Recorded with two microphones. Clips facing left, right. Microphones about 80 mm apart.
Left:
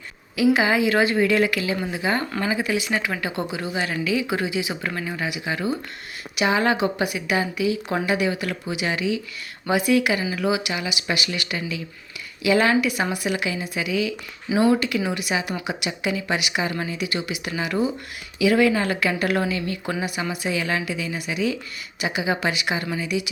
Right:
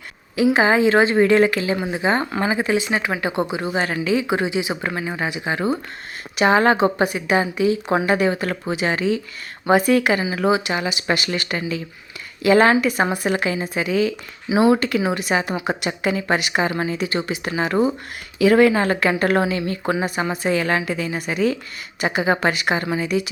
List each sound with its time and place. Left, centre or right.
0.3 s a woman's voice: right
14.5 s speech: right
14.8 s a woman's voice: right